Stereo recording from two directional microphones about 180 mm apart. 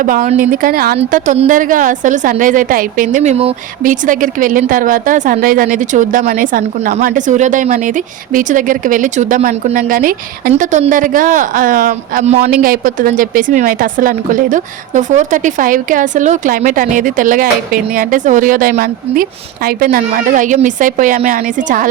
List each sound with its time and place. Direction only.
0.0 s speech: 45° right (ahead or behind)
3.8 s speech: 50° right (ahead or behind)
10.5 s speech: 40° right (ahead or behind)
12.4 s speech: 50° right (ahead or behind)